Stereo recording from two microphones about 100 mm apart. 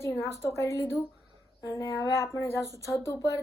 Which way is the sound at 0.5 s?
30° left (ahead or behind).